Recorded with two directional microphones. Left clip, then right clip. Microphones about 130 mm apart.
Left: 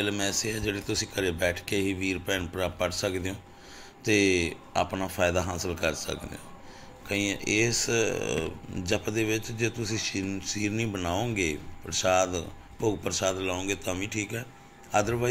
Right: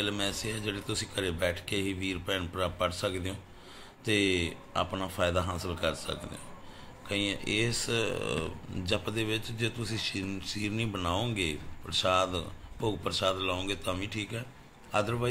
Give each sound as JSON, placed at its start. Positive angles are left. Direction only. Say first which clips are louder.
{"t": 0.0, "sound": "speech", "louder": "left 3 dB", "side_deg": 15}